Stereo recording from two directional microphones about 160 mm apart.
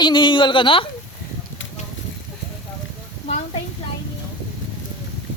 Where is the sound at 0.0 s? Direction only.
30° left (ahead or behind).